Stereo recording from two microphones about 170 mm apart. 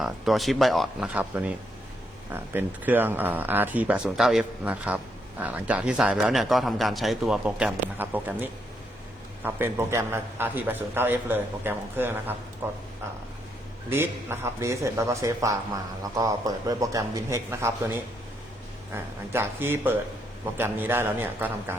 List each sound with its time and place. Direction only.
0.0 s a man's voice: centre (ahead or behind)
13.9 s a man's voice: 15° right (ahead or behind)